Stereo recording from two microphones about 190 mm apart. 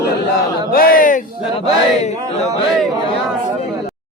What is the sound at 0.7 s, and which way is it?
Speech, 50° left (ahead or behind).